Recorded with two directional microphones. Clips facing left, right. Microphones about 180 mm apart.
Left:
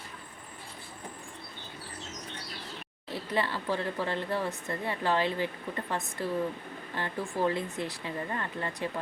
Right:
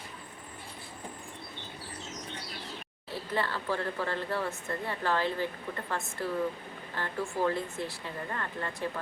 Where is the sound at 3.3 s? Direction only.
15° left (ahead or behind).